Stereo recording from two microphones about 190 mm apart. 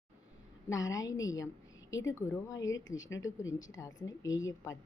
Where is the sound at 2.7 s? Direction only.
90° left.